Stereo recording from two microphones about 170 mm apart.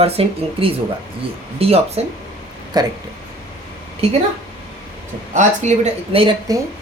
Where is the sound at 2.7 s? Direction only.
25° right (ahead or behind).